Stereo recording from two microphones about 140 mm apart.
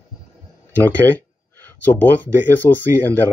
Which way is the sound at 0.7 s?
10° left (ahead or behind).